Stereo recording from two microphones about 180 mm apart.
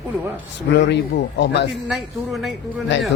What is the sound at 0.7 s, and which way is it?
Speech, 75° left (ahead or behind).